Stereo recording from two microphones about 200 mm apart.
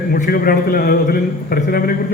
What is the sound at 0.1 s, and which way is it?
A man's voice, 45° left (ahead or behind).